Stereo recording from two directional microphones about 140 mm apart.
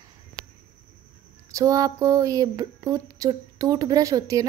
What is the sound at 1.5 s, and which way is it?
A woman's voice, 25° right (ahead or behind).